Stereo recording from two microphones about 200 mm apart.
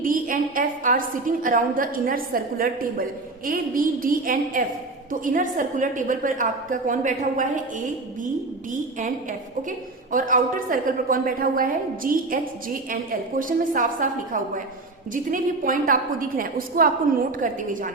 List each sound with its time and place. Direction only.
0.0 s a woman's voice: 45° right (ahead or behind)
9.6 s a woman's voice: 40° right (ahead or behind)